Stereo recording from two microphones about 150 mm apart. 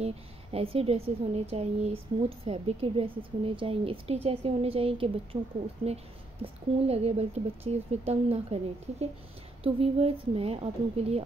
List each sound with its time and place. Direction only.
0.0 s speech: 40° right (ahead or behind)
9.6 s speech: 40° right (ahead or behind)